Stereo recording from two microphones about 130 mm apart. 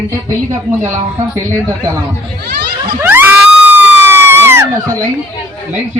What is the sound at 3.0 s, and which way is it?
Screaming, 15° right (ahead or behind).